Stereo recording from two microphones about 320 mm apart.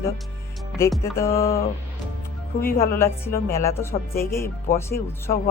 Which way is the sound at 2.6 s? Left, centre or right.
Centre.